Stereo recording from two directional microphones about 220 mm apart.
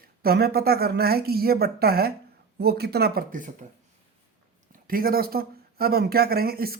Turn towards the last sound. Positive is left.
turn(degrees=-45)  # may be behind; listen again after turning